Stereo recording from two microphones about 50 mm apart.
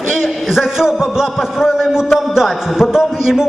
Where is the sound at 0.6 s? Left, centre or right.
Centre.